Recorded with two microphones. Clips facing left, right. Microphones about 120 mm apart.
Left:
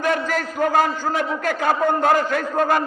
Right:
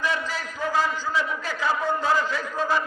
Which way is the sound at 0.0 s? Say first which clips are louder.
Left 6 dB; 50° left (ahead or behind).